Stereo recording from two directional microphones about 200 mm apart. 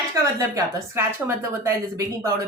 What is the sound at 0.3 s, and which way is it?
Speech, 15° right (ahead or behind).